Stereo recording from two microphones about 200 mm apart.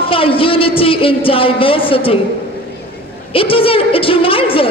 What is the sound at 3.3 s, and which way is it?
A woman's voice, 25° left (ahead or behind).